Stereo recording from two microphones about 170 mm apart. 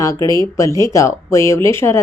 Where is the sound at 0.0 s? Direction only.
20° left (ahead or behind).